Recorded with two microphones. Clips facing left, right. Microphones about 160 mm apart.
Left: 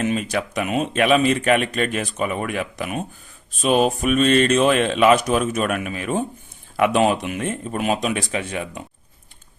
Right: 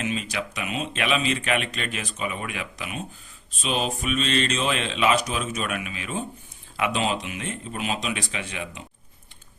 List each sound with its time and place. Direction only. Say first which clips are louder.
0.0 s speech: left 6 dB; 50° left (ahead or behind)